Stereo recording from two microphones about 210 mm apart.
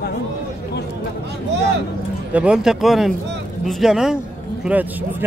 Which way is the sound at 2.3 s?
5° right (ahead or behind).